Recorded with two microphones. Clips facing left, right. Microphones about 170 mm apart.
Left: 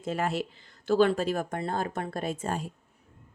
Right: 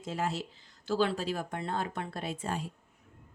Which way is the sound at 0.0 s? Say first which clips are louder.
Left 4 dB; 60° left (ahead or behind).